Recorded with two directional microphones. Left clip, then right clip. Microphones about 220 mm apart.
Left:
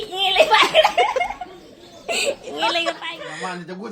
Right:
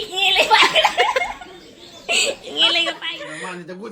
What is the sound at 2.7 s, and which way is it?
Speech, 40° left (ahead or behind).